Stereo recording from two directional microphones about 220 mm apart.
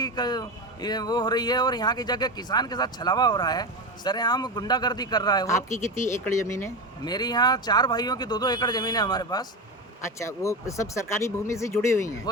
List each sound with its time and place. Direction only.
0.0 s speech: 20° left (ahead or behind)